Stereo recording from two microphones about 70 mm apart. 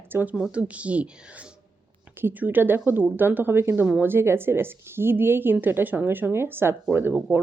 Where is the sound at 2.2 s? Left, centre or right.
Right.